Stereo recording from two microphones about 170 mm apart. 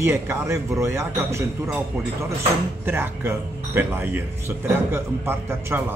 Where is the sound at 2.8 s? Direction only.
15° right (ahead or behind).